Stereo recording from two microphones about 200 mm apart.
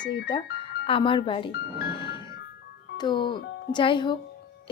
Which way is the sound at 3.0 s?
25° left (ahead or behind).